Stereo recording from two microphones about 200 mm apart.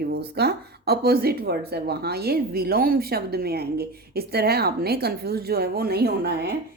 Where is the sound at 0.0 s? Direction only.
50° right (ahead or behind).